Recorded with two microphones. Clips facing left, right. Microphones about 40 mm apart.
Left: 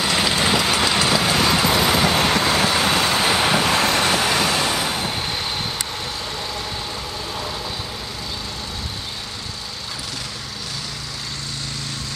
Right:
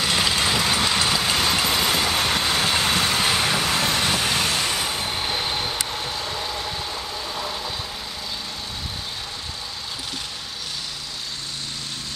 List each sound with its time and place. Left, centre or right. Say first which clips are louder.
0.0 s vehicle: left 2 dB; centre
4.9 s vehicle: left 1 dB; centre